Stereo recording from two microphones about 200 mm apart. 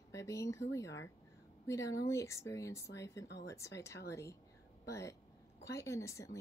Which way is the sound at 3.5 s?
15° left (ahead or behind).